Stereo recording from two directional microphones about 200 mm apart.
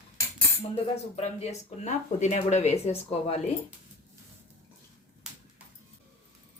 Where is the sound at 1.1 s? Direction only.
30° left (ahead or behind).